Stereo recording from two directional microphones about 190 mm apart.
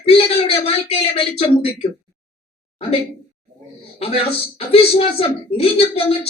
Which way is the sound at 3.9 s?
30° left (ahead or behind).